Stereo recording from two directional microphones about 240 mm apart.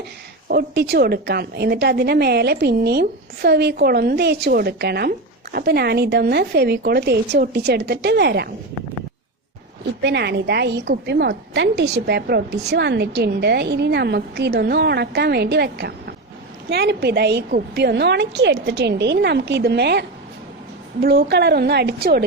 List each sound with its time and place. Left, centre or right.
0.4 s a woman's voice: right
10.0 s a woman's voice: right